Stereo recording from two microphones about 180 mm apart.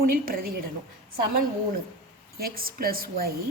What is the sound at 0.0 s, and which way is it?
Speech, 55° right (ahead or behind).